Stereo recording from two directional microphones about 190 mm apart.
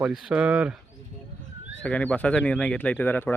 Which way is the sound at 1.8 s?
5° left (ahead or behind).